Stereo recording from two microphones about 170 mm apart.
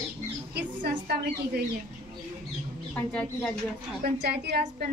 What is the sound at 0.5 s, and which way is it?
Speech, 80° right.